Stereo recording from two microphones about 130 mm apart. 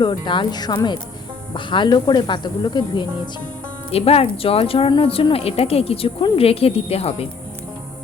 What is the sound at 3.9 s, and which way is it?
Speech, 50° left (ahead or behind).